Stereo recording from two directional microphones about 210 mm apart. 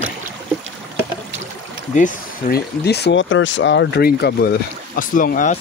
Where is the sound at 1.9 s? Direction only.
40° left (ahead or behind).